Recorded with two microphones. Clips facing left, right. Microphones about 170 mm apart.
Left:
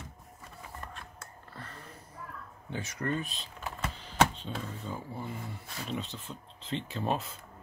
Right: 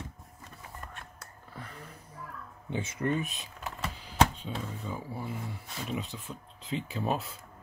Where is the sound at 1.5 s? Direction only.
10° right (ahead or behind).